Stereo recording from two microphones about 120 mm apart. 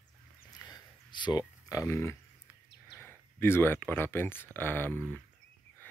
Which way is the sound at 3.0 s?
20° left (ahead or behind).